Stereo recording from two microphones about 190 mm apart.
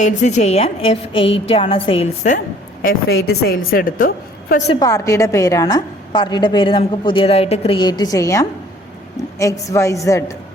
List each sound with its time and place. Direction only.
0.0 s a woman's voice: 40° left (ahead or behind)
3.4 s a woman's voice: 50° left (ahead or behind)
4.7 s a woman's voice: 20° left (ahead or behind)